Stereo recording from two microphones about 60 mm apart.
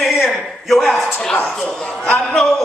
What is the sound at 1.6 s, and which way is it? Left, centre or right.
Speech, left.